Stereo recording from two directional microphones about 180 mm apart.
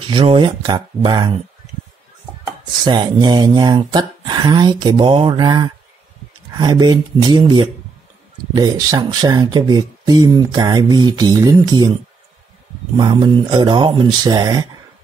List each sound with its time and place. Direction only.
0.0 s speech: 30° right (ahead or behind)
2.8 s speech: 25° right (ahead or behind)
12.9 s speech: 25° right (ahead or behind)